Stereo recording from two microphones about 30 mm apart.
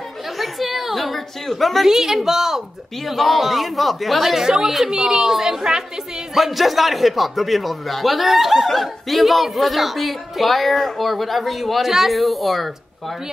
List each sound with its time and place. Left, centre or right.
0.4 s a woman's voice: centre
1.9 s a woman's voice: centre
3.1 s a woman's voice: centre; by 5.9 s right
6.3 s speech: centre
11.8 s a woman's voice: centre
12.1 s speech: centre